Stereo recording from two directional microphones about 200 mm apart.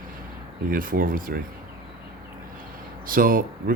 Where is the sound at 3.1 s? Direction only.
45° right (ahead or behind).